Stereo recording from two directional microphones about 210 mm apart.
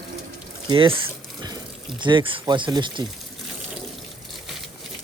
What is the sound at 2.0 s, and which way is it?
Speech, 20° right (ahead or behind).